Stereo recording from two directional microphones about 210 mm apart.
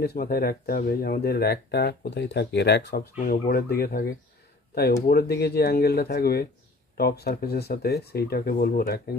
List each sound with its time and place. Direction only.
0.0 s speech: 45° left (ahead or behind)
5.0 s speech: 50° left (ahead or behind)